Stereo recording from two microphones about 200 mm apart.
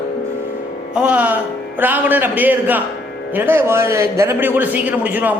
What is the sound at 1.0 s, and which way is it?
A man's voice, 5° right (ahead or behind).